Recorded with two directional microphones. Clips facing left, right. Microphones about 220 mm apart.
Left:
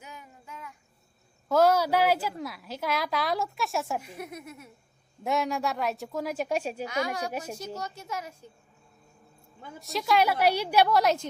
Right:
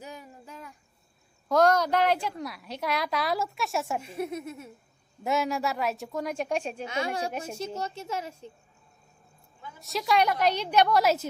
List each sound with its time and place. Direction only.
0.0 s child singing: 35° right (ahead or behind)
1.5 s a woman's voice: 5° left (ahead or behind)
4.0 s a woman's voice: 25° right (ahead or behind)
5.2 s a woman's voice: centre (ahead or behind)
6.8 s a woman's voice: 25° right (ahead or behind)
9.8 s a woman's voice: centre (ahead or behind)